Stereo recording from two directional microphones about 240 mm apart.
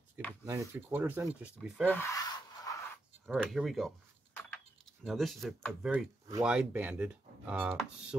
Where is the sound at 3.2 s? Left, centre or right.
Centre.